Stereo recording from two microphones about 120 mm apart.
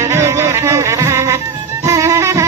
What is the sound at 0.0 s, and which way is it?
Music, 20° right (ahead or behind).